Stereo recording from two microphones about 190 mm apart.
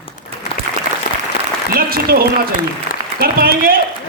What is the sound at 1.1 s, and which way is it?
Applause, 45° left (ahead or behind).